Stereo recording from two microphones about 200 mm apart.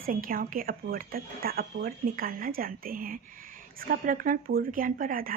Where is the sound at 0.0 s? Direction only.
45° right (ahead or behind).